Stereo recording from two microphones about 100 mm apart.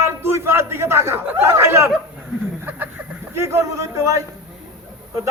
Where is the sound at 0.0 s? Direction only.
25° right (ahead or behind).